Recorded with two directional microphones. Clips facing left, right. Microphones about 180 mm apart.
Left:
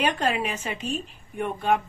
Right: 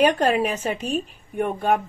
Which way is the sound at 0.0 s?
40° right (ahead or behind).